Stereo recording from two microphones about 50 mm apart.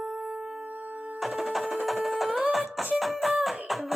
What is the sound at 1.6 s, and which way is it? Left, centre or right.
Music, centre.